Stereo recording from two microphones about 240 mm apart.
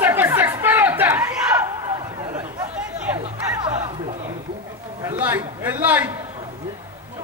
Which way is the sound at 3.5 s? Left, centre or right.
Centre.